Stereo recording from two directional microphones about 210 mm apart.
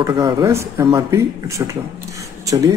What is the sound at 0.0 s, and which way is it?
Speech, 15° right (ahead or behind).